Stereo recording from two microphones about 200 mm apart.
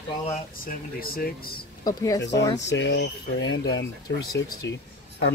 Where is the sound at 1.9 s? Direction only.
20° left (ahead or behind).